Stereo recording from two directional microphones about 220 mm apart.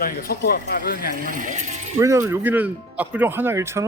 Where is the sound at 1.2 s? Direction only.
40° right (ahead or behind).